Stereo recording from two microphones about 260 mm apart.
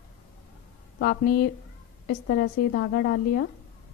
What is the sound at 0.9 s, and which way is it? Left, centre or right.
A woman's voice, left.